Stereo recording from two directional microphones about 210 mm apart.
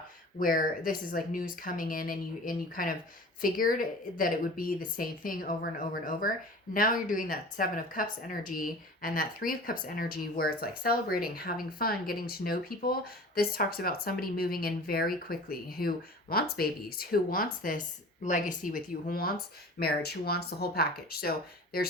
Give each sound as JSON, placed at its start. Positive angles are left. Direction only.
{"t": 0.3, "sound": "speech", "side_deg": 40}